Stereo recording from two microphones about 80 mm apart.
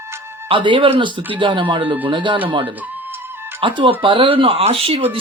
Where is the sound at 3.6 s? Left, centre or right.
Right.